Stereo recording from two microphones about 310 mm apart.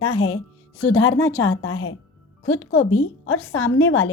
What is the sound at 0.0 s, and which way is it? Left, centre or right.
A woman's voice, left.